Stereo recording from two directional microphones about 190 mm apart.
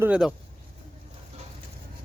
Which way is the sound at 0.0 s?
5° right (ahead or behind).